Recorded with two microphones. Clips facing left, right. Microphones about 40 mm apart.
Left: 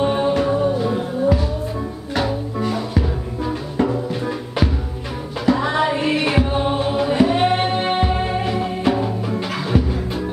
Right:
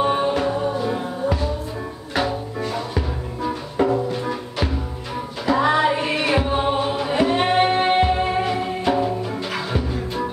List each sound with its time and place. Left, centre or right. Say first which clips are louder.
0.0 s music: left 1 dB; centre
2.7 s music: left 2 dB; centre